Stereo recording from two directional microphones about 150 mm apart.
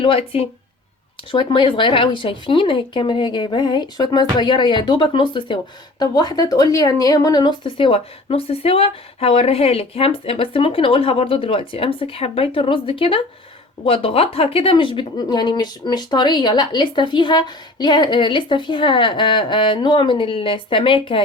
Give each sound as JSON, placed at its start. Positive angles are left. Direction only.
{"t": 0.0, "sound": "speech", "side_deg": 40}